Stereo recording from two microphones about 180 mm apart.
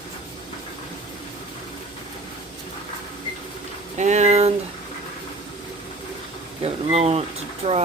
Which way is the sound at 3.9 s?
40° right (ahead or behind).